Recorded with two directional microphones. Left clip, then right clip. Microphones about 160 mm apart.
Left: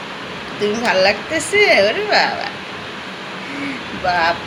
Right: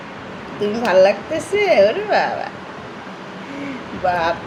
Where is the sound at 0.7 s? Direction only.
45° right (ahead or behind).